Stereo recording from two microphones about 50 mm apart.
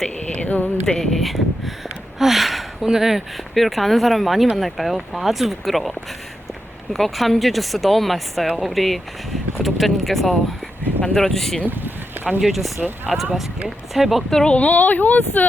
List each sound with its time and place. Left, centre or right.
0.3 s a sound: left
0.9 s speech: centre
1.2 s speech: centre
11.0 s speech: centre
11.6 s speech: right
12.4 s speech: centre
14.3 s speech: centre
14.5 s speech: left